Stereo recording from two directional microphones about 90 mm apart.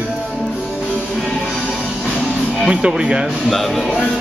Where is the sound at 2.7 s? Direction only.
10° right (ahead or behind).